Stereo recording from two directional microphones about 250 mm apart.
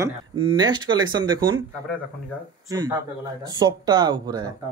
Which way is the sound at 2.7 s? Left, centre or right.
Centre.